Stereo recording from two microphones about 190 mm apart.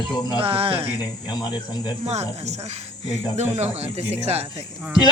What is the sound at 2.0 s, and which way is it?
Speech, 35° right (ahead or behind).